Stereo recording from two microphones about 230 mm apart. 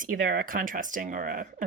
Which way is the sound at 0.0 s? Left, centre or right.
Right.